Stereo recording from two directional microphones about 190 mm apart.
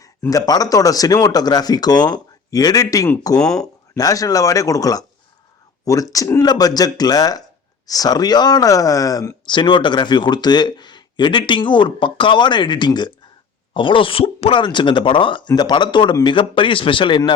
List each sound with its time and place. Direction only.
0.0 s speech: 20° left (ahead or behind)